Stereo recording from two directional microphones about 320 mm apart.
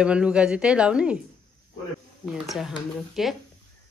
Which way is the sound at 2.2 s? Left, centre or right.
Centre.